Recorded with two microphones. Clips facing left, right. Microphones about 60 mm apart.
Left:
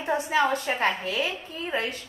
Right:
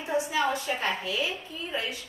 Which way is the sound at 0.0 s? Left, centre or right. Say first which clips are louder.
Left 3 dB; left.